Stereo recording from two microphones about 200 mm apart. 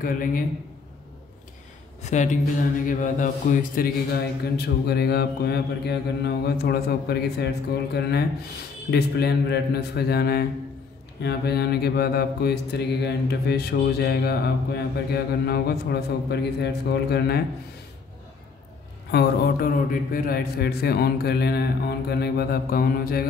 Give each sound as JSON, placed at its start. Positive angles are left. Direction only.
{"t": 0.0, "sound": "mantra", "side_deg": 45}
{"t": 2.0, "sound": "speech", "side_deg": 35}
{"t": 2.9, "sound": "mantra", "side_deg": 40}
{"t": 19.0, "sound": "mantra", "side_deg": 55}